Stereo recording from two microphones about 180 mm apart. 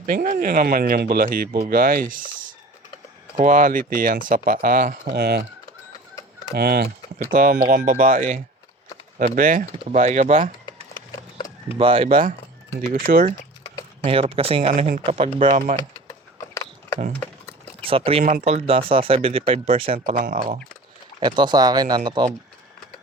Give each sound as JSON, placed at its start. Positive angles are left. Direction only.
{"t": 0.0, "sound": "speech", "side_deg": -45}
{"t": 5.0, "sound": "speech", "side_deg": -65}
{"t": 6.5, "sound": "speech", "side_deg": -60}
{"t": 7.2, "sound": "speech", "side_deg": -50}
{"t": 11.3, "sound": "a sound", "side_deg": 30}
{"t": 11.8, "sound": "speech", "side_deg": -30}
{"t": 12.8, "sound": "speech", "side_deg": -50}
{"t": 14.0, "sound": "speech", "side_deg": -30}
{"t": 14.8, "sound": "speech", "side_deg": -40}
{"t": 16.4, "sound": "a sound", "side_deg": 20}
{"t": 17.8, "sound": "speech", "side_deg": -30}
{"t": 20.1, "sound": "speech", "side_deg": -50}
{"t": 21.2, "sound": "speech", "side_deg": -25}